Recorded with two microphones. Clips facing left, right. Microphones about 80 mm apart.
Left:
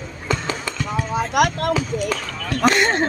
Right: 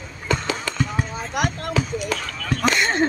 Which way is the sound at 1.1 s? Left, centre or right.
Left.